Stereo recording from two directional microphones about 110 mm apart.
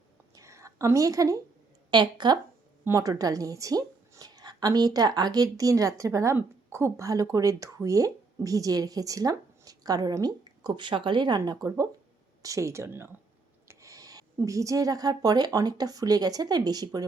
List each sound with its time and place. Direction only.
0.3 s a sound: 25° right (ahead or behind)
1.9 s speech: 45° right (ahead or behind)
2.8 s a woman's voice: 30° right (ahead or behind)